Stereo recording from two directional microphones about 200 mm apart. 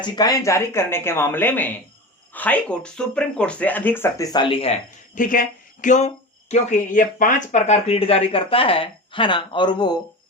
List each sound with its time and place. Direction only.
0.0 s speech: 20° left (ahead or behind)
5.1 s speech: 45° left (ahead or behind); by 10.0 s 20° left (ahead or behind)